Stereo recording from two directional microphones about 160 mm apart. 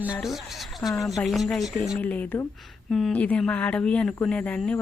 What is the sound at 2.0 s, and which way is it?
Speech, 10° left (ahead or behind).